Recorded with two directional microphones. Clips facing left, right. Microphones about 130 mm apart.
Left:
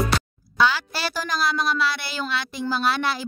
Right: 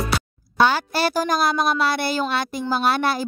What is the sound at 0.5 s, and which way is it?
A woman's voice, 50° right (ahead or behind).